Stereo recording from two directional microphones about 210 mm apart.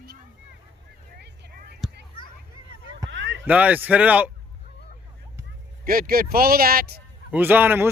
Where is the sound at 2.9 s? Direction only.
60° right (ahead or behind).